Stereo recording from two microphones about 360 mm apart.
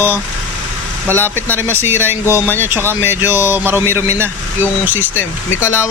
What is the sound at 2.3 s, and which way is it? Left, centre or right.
Speech, centre.